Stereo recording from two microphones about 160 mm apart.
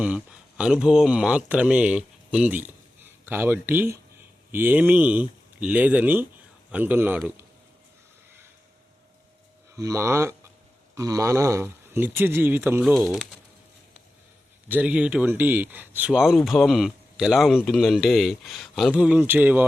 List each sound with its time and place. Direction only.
0.0 s speech: 10° right (ahead or behind)
9.7 s speech: 20° right (ahead or behind)
13.1 s speech: centre (ahead or behind)
14.7 s speech: 10° right (ahead or behind)